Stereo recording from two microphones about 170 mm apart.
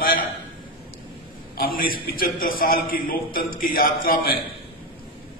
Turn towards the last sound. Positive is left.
turn(degrees=55)  # may be behind; listen again after turning